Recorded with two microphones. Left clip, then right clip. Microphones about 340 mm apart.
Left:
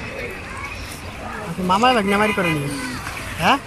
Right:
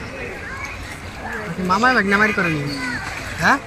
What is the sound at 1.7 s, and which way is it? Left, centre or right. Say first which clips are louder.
Speech: even; centre.